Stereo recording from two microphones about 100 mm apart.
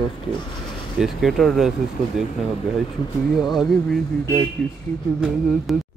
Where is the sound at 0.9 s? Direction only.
5° right (ahead or behind).